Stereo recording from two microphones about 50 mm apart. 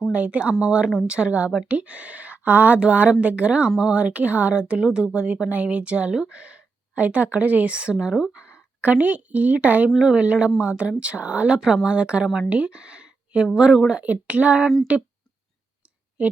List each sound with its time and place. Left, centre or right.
0.1 s a woman's voice: right
8.1 s speech: centre
8.8 s a woman's voice: right